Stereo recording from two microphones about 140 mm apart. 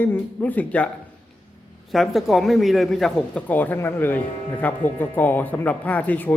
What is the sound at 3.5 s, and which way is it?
Speech, 10° left (ahead or behind).